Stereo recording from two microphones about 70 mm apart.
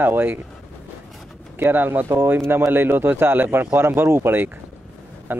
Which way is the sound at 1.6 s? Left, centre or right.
Right.